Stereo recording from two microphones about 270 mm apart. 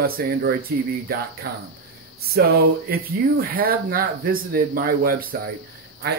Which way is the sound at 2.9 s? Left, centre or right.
Right.